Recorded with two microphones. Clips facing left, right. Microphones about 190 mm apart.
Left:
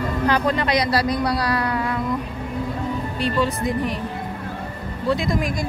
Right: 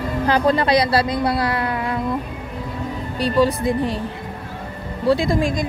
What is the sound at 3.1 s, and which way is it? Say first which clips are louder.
Speech: right 6 dB; 35° right (ahead or behind).